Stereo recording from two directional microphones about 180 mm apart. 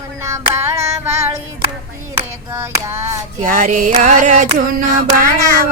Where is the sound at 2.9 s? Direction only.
15° right (ahead or behind).